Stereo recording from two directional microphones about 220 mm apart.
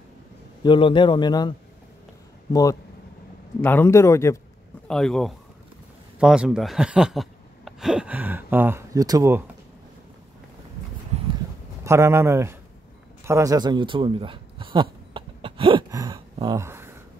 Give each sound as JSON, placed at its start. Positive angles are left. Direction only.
{"t": 0.7, "sound": "a man's voice", "side_deg": 20}
{"t": 2.5, "sound": "a man's voice", "side_deg": 15}
{"t": 11.8, "sound": "speech", "side_deg": -10}
{"t": 13.2, "sound": "a sound", "side_deg": -15}